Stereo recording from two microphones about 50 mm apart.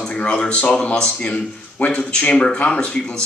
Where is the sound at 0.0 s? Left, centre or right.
Left.